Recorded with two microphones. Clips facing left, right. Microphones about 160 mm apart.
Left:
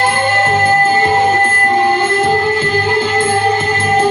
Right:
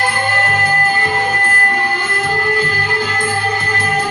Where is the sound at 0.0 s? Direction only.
20° left (ahead or behind).